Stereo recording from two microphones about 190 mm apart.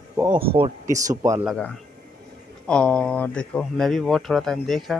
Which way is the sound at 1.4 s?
5° left (ahead or behind).